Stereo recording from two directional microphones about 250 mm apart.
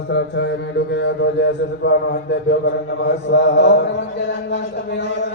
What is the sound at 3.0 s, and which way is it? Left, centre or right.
Chant, left.